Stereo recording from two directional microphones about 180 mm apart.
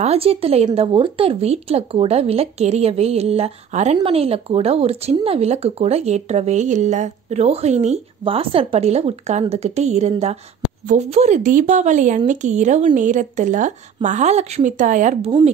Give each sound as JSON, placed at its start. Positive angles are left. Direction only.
{"t": 0.0, "sound": "speech", "side_deg": -35}